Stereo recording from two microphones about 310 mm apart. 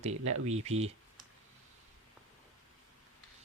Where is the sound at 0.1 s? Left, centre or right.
Right.